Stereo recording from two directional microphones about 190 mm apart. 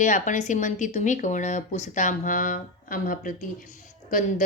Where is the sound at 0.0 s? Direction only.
40° left (ahead or behind).